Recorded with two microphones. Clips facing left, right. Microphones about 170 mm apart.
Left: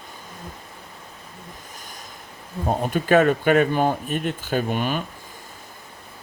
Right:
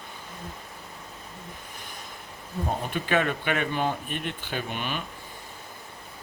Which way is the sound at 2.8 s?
45° left (ahead or behind).